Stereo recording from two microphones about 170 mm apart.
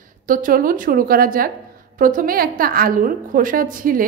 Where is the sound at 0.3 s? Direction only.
55° right (ahead or behind).